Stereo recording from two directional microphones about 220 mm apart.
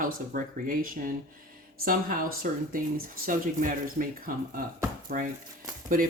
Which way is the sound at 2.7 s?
40° right (ahead or behind).